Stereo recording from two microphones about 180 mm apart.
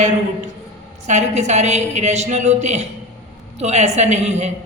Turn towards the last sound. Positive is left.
turn(degrees=-40)  # may be behind; listen again after turning